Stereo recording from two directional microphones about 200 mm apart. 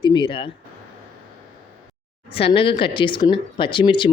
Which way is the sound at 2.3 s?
30° left (ahead or behind).